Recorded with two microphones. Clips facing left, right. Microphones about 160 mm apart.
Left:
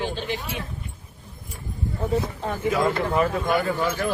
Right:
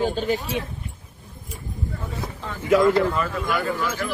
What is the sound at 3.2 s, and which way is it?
Speech, 40° left (ahead or behind).